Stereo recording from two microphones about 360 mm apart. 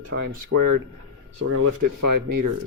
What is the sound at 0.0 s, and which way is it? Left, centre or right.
Speech, right.